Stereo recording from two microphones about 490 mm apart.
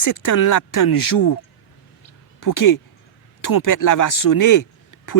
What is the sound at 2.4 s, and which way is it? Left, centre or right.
Speech, left.